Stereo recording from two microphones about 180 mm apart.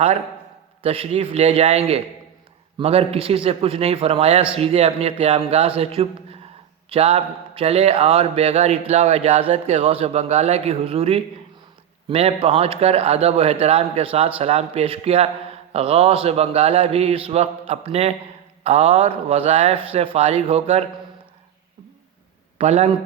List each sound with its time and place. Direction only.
0.8 s a man's voice: 30° right (ahead or behind)
22.5 s a man's voice: 35° right (ahead or behind)